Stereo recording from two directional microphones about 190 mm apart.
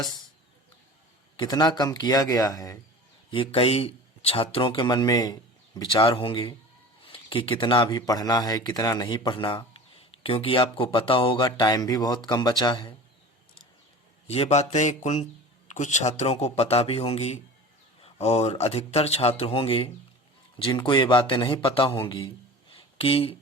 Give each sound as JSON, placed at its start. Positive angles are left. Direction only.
{"t": 1.4, "sound": "speech", "side_deg": 20}
{"t": 3.2, "sound": "speech", "side_deg": 30}
{"t": 14.3, "sound": "speech", "side_deg": 30}
{"t": 22.7, "sound": "a sound", "side_deg": 30}